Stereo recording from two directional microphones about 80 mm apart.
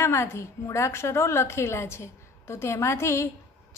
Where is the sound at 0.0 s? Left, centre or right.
Left.